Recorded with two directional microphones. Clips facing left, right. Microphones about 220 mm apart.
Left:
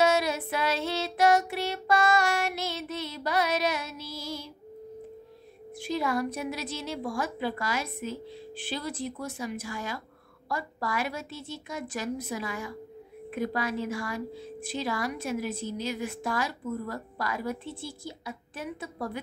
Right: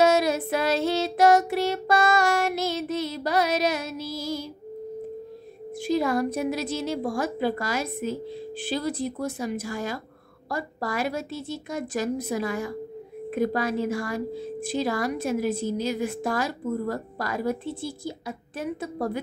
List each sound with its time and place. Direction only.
0.0 s music: 45° right (ahead or behind)
5.8 s a woman's voice: 40° right (ahead or behind)